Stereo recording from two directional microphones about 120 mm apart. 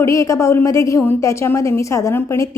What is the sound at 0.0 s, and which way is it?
Speech, 25° left (ahead or behind).